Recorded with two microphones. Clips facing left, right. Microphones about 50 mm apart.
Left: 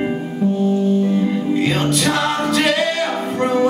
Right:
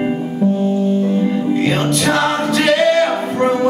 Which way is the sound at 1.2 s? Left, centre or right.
Centre.